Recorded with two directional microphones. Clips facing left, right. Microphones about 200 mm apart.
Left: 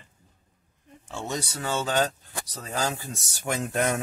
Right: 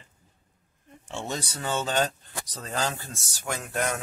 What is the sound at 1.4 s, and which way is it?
Speech, 10° left (ahead or behind).